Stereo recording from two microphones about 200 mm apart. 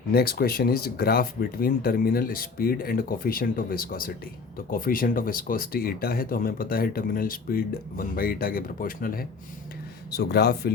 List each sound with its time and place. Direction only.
0.1 s a man's voice: 50° left (ahead or behind)